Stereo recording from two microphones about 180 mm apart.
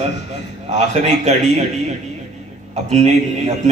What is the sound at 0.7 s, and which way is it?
Speech, 40° right (ahead or behind).